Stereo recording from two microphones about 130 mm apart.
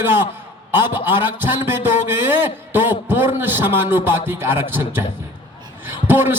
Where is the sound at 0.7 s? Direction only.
15° right (ahead or behind).